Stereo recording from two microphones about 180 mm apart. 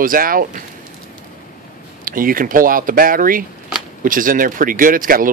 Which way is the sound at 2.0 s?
50° right (ahead or behind).